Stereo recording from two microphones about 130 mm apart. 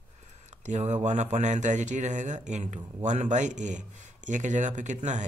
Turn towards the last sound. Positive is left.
turn(degrees=-65)  # may be behind; listen again after turning